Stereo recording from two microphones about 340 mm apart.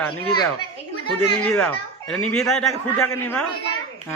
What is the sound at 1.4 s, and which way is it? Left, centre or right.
Speech, centre.